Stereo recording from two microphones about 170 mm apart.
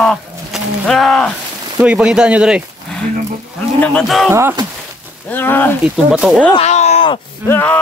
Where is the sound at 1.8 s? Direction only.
5° right (ahead or behind).